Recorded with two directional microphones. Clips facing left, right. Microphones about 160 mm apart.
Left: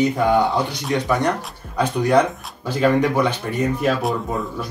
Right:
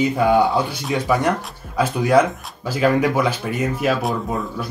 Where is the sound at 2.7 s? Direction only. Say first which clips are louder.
Even; 5° right (ahead or behind).